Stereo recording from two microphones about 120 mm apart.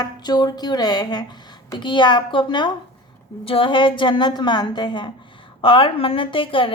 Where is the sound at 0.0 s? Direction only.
35° left (ahead or behind).